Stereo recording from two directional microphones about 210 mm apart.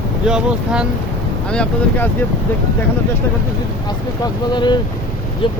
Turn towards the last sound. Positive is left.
turn(degrees=20)  # may be behind; listen again after turning